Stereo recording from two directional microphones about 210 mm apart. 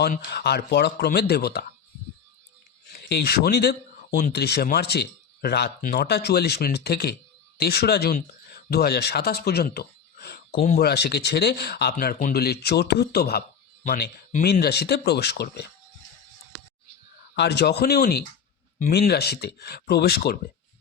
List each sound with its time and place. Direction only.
0.0 s speech: 45° left (ahead or behind)
2.9 s speech: 50° left (ahead or behind)
17.3 s speech: 55° left (ahead or behind)